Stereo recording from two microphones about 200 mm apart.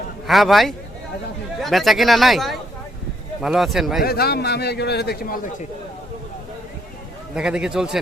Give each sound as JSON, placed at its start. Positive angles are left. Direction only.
{"t": 0.3, "sound": "speech", "side_deg": 0}
{"t": 4.0, "sound": "a man's voice", "side_deg": 50}
{"t": 7.3, "sound": "speech", "side_deg": -5}